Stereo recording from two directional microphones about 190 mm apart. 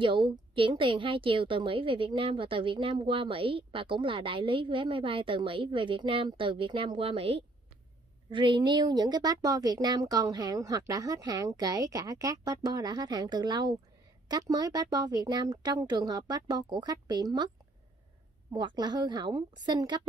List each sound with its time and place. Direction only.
0.6 s a woman's voice: 25° right (ahead or behind)
18.5 s a woman's voice: 25° right (ahead or behind)